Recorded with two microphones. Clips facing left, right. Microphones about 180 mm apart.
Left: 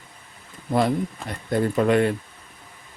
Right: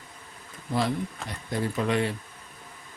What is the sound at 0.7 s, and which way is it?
Speech, 55° left (ahead or behind).